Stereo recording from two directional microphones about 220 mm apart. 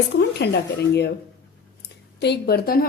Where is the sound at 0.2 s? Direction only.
50° left (ahead or behind).